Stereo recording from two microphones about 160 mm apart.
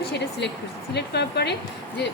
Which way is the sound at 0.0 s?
90° left.